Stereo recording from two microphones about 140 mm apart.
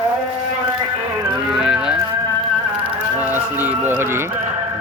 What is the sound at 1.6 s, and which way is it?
Music, 5° right (ahead or behind).